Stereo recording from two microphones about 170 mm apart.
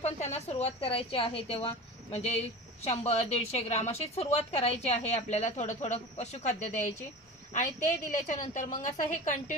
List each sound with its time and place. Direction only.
0.0 s a woman's voice: 40° left (ahead or behind)
7.5 s a woman's voice: 50° left (ahead or behind)